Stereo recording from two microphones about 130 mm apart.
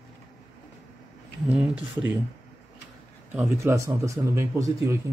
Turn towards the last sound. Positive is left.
turn(degrees=-25)  # may be behind; listen again after turning